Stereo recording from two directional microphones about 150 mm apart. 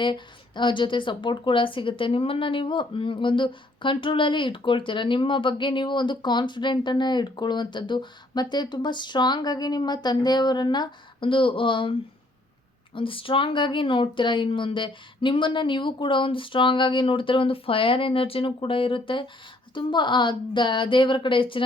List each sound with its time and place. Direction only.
0.0 s a woman's voice: 30° left (ahead or behind)